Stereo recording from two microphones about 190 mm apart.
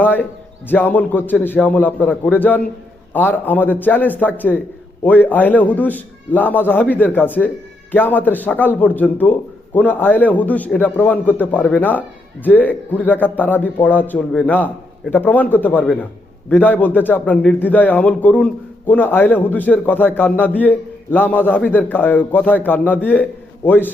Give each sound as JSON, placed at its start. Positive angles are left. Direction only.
{"t": 0.0, "sound": "a man's voice", "side_deg": 10}